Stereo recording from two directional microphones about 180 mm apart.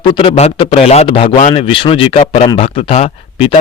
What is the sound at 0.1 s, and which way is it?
Speech, 30° left (ahead or behind).